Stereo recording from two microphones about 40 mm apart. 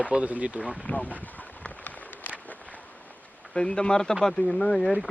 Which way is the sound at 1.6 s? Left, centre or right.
Left.